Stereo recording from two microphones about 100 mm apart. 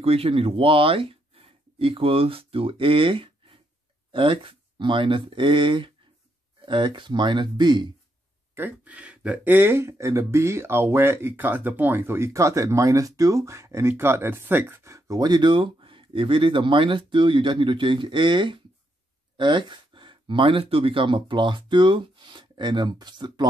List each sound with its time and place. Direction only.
0.0 s speech: 75° right (ahead or behind); by 7.9 s 50° right (ahead or behind)
8.5 s speech: 15° right (ahead or behind); by 23.4 s 45° right (ahead or behind)